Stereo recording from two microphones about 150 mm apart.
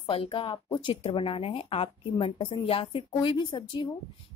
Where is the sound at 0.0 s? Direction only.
35° left (ahead or behind).